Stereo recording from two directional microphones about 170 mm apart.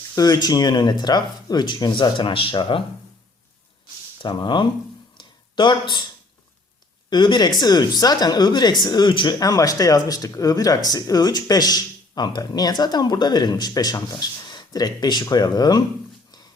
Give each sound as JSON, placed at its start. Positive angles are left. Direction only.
{"t": 0.2, "sound": "speech", "side_deg": 25}
{"t": 4.2, "sound": "speech", "side_deg": 30}
{"t": 5.1, "sound": "a sound", "side_deg": 25}
{"t": 7.1, "sound": "speech", "side_deg": 25}